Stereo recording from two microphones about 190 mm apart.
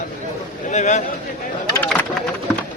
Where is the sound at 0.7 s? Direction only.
40° left (ahead or behind).